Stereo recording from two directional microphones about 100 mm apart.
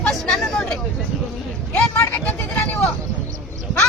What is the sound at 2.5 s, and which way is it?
Speech, 20° left (ahead or behind).